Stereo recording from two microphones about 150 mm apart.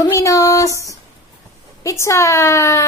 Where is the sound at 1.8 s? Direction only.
20° left (ahead or behind).